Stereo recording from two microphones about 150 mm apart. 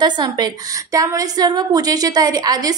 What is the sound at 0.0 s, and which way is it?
A woman's voice, 30° right (ahead or behind).